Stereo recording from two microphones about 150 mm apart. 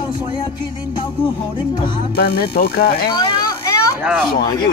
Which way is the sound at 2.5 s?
80° left.